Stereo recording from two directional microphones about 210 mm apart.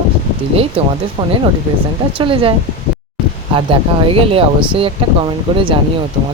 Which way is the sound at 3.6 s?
25° right (ahead or behind).